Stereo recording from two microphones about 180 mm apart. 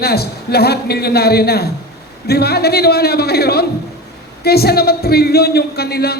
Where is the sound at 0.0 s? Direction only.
60° left (ahead or behind).